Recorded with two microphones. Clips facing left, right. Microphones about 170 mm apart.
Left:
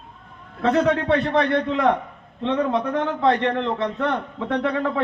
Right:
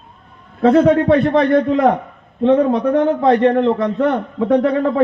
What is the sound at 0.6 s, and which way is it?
A man's voice, 40° right (ahead or behind).